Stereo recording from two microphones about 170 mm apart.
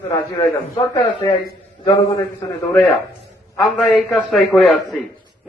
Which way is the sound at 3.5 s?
5° left (ahead or behind).